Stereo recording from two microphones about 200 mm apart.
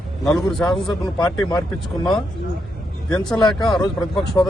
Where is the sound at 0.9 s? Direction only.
20° left (ahead or behind).